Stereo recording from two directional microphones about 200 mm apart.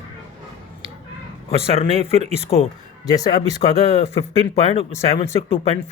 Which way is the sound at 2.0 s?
35° right (ahead or behind).